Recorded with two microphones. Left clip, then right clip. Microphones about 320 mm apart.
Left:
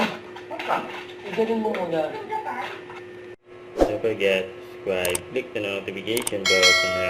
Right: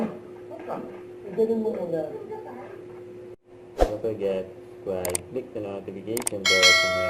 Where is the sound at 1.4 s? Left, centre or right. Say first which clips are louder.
Even; centre.